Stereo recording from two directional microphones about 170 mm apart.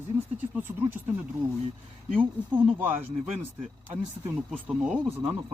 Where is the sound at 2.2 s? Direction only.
10° right (ahead or behind).